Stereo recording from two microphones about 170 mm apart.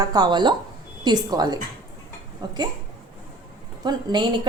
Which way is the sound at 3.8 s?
25° right (ahead or behind).